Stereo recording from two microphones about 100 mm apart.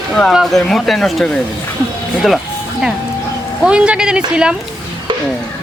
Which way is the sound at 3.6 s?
10° right (ahead or behind).